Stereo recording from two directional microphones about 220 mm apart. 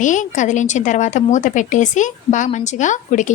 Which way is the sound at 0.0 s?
35° left (ahead or behind).